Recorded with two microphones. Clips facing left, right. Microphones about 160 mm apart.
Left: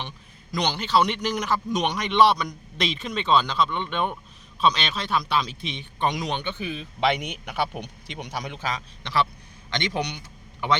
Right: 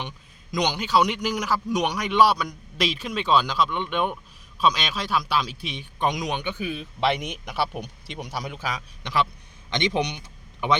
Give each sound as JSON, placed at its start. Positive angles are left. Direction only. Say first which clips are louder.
{"t": 0.5, "sound": "a man's voice", "louder": "right 1 dB", "side_deg": -15}